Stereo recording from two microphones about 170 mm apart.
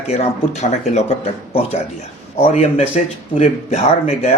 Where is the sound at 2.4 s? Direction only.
35° left (ahead or behind).